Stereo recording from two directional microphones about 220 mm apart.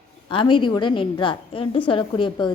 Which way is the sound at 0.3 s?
20° left (ahead or behind).